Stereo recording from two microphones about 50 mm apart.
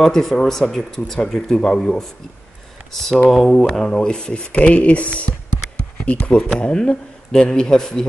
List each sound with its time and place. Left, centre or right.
0.0 s speech: centre